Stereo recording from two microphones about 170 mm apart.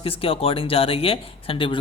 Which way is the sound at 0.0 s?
35° left (ahead or behind).